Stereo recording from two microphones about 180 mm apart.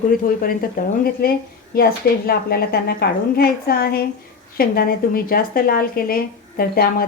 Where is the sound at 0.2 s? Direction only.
50° left (ahead or behind).